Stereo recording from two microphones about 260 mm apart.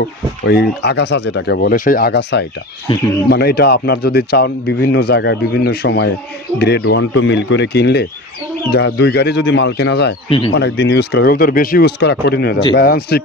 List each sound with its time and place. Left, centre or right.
0.5 s speech: left
2.9 s speech: centre
3.3 s speech: left